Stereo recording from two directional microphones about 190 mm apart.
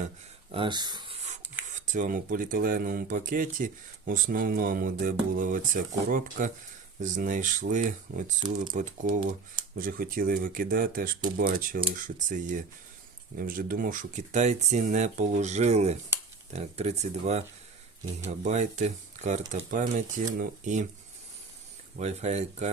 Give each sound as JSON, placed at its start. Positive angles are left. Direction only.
{"t": 0.5, "sound": "a sound", "side_deg": -25}
{"t": 1.7, "sound": "speech", "side_deg": -40}
{"t": 21.9, "sound": "speech", "side_deg": -35}